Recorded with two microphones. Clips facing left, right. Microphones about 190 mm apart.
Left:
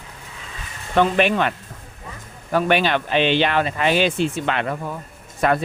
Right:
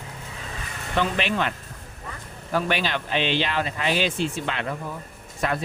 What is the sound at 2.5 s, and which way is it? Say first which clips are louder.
Speech: left 6 dB; 60° left (ahead or behind).